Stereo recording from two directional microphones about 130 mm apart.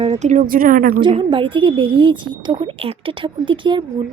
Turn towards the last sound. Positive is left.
turn(degrees=-40)  # may be behind; listen again after turning